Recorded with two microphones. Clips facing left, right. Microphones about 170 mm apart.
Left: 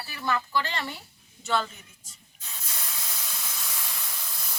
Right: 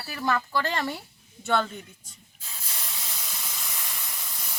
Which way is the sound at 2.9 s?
5° right (ahead or behind).